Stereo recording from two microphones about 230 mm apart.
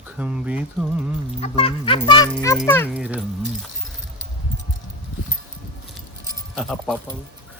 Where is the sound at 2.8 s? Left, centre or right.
Centre.